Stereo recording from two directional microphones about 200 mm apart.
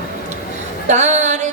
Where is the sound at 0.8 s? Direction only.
35° right (ahead or behind).